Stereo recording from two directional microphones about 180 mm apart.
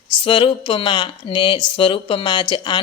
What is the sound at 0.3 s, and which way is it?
A woman's voice, 30° left (ahead or behind).